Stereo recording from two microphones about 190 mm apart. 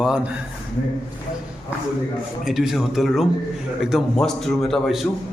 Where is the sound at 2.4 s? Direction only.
Centre (ahead or behind).